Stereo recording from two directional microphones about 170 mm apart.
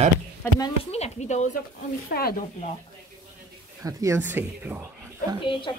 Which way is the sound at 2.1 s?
65° left (ahead or behind).